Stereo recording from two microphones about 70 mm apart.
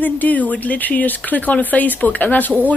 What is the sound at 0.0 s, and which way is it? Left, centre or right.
Speech, left.